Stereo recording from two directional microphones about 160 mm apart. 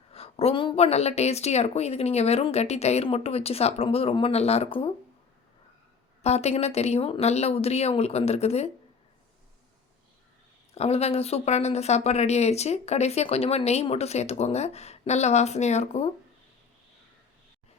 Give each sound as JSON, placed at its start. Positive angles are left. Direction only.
{"t": 0.1, "sound": "a woman's voice", "side_deg": 40}
{"t": 6.2, "sound": "a woman's voice", "side_deg": 40}
{"t": 10.8, "sound": "speech", "side_deg": 40}